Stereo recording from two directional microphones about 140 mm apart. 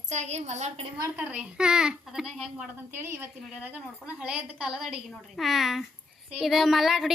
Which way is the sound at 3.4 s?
5° right (ahead or behind).